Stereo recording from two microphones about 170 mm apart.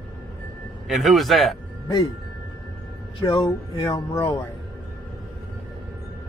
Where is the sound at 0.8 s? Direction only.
Centre (ahead or behind).